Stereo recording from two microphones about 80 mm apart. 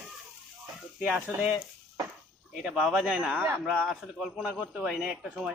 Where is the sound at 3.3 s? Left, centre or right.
Right.